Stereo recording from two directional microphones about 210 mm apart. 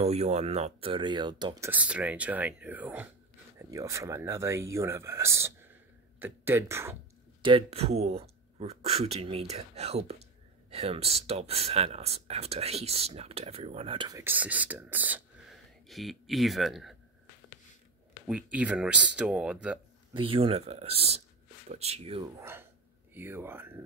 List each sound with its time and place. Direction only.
0.0 s speech: 30° right (ahead or behind); by 7.0 s 10° right (ahead or behind)
7.4 s speech: 25° right (ahead or behind); by 16.9 s centre (ahead or behind)
18.2 s speech: 5° right (ahead or behind)
20.2 s speech: 25° right (ahead or behind)
22.4 s speech: 10° right (ahead or behind)